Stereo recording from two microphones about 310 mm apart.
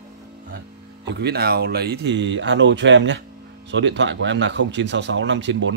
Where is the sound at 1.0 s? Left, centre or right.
Right.